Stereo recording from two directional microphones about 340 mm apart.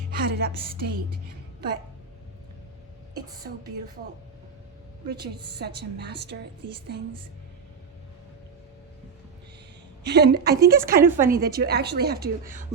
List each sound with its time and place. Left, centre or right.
0.1 s music: right
0.7 s a woman's voice: right
5.0 s a woman's voice: right
10.0 s a woman's voice: right
11.0 s a woman's voice: centre
11.3 s a woman's voice: right